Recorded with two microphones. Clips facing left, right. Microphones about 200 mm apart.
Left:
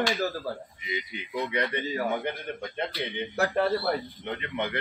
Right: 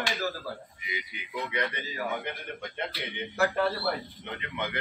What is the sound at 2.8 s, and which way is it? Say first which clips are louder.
A man's voice: left 5 dB; 35° left (ahead or behind).